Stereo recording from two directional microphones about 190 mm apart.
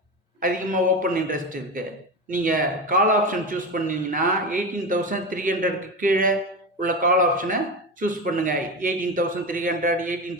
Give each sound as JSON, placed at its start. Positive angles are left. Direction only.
{"t": 0.4, "sound": "a man's voice", "side_deg": -45}